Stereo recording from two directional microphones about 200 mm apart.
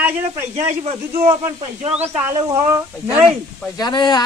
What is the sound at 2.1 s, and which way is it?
Speech, 15° right (ahead or behind).